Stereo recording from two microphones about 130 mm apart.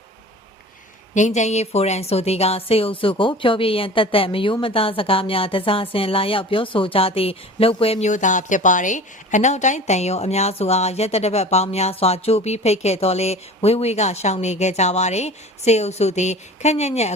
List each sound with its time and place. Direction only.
1.1 s a woman's voice: 65° left (ahead or behind)